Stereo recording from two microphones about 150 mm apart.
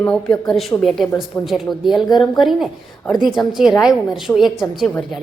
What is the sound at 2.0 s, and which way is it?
Speech, 25° left (ahead or behind).